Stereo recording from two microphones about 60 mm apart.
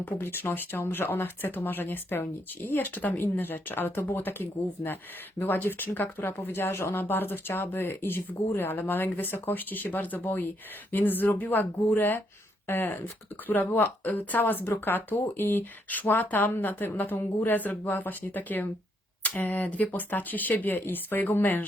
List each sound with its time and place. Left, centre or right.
0.0 s speech: left